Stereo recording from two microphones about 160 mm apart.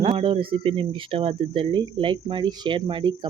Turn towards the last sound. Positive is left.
turn(degrees=-30)  # may be behind; listen again after turning